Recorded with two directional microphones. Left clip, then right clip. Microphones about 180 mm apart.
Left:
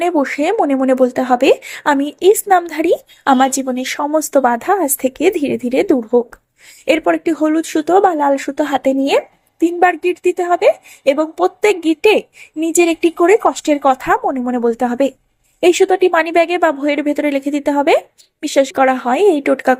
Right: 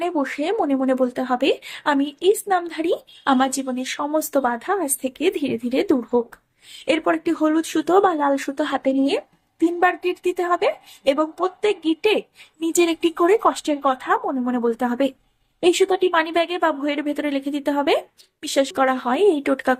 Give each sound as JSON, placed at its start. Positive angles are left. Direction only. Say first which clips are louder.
{"t": 0.0, "sound": "speech", "louder": "left 8 dB", "side_deg": 30}